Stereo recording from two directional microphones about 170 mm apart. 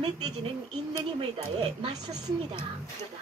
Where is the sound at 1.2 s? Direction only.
35° right (ahead or behind).